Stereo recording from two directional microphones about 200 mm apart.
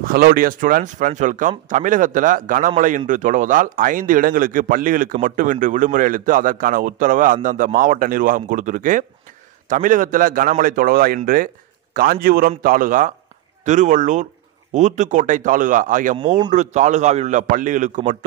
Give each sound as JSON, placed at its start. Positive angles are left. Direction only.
{"t": 0.0, "sound": "a man's voice", "side_deg": -45}
{"t": 16.2, "sound": "a man's voice", "side_deg": -20}
{"t": 16.5, "sound": "a man's voice", "side_deg": -35}